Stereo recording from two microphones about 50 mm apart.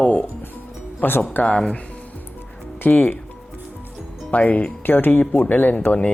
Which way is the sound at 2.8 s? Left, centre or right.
Left.